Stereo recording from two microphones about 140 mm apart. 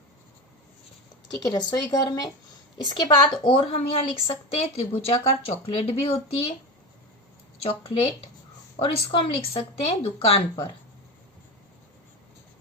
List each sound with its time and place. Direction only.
1.3 s a woman's voice: 25° left (ahead or behind); by 6.1 s 40° left (ahead or behind)
7.6 s a woman's voice: 45° left (ahead or behind)